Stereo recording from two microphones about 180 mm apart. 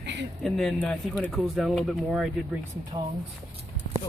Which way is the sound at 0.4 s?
5° left (ahead or behind).